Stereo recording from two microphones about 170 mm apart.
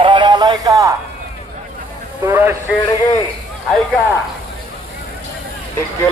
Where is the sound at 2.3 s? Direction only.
15° right (ahead or behind).